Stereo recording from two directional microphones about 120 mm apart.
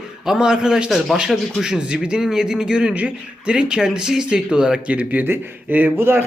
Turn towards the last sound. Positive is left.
turn(degrees=-20)  # may be behind; listen again after turning